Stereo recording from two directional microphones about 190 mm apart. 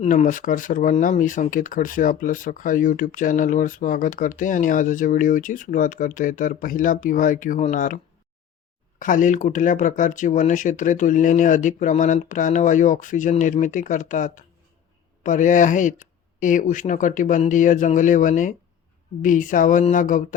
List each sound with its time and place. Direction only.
0.0 s speech: 40° left (ahead or behind)
9.0 s speech: 45° left (ahead or behind)